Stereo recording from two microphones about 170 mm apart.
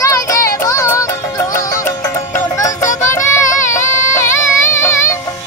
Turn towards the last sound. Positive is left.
turn(degrees=15)  # may be behind; listen again after turning